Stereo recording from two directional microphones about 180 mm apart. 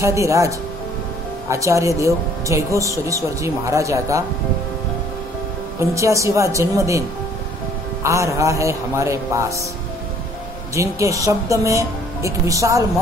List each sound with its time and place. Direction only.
0.0 s speech: 15° right (ahead or behind)
5.8 s speech: 15° right (ahead or behind)
10.7 s speech: 15° right (ahead or behind)